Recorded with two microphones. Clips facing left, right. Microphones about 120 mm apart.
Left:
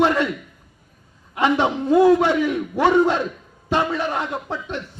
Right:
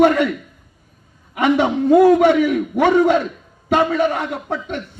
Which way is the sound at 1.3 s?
60° right (ahead or behind).